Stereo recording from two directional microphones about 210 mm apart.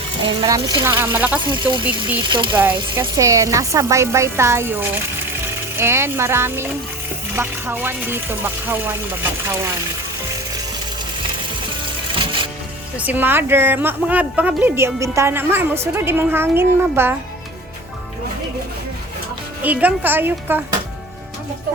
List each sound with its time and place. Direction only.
0.3 s a woman's voice: 20° right (ahead or behind)
1.5 s a woman's voice: 20° right (ahead or behind)
12.1 s music: 25° right (ahead or behind)
13.0 s a woman's voice: 10° right (ahead or behind)
19.6 s a woman's voice: 5° right (ahead or behind)